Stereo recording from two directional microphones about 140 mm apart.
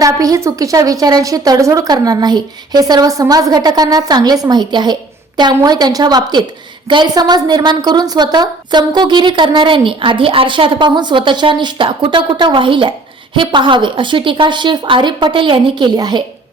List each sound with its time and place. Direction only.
0.0 s a woman's voice: 25° right (ahead or behind)